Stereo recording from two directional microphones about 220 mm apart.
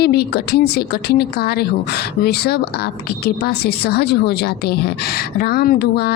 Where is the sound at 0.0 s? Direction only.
45° left (ahead or behind).